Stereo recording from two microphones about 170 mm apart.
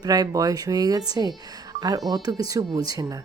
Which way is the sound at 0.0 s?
20° right (ahead or behind).